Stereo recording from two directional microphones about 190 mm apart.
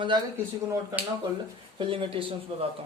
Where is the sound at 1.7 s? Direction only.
25° right (ahead or behind).